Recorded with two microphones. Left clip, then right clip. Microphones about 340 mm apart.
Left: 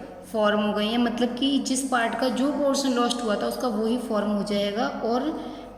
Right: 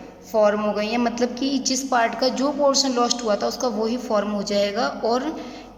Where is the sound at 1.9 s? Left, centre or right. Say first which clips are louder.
Right 4 dB; centre.